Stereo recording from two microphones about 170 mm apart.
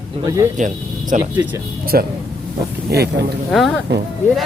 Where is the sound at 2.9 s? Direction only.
70° right (ahead or behind).